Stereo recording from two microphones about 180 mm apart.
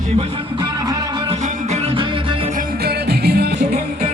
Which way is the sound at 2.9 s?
60° right (ahead or behind).